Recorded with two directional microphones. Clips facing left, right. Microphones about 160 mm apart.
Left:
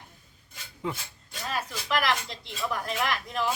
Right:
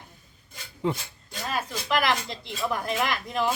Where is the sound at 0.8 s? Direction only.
30° right (ahead or behind).